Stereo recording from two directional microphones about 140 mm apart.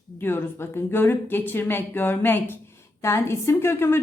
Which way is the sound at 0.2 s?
15° left (ahead or behind).